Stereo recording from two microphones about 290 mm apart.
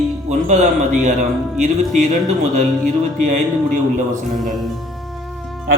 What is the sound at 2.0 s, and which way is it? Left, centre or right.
Speech, right.